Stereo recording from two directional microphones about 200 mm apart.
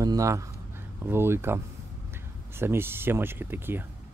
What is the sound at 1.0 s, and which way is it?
Speech, 10° right (ahead or behind).